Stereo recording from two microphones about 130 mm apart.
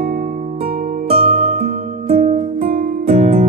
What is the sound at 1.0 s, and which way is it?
Music, 50° right (ahead or behind).